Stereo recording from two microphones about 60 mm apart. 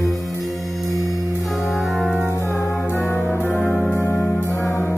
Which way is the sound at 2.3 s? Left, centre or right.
Left.